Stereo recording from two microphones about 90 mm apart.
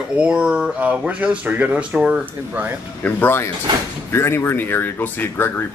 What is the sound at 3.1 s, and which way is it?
Speech, 20° left (ahead or behind).